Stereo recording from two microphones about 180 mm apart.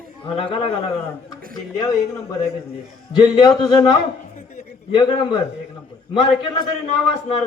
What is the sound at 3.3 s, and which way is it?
Speech, 25° left (ahead or behind).